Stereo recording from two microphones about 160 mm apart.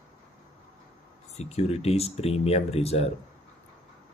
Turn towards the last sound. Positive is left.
turn(degrees=40)  # may be behind; listen again after turning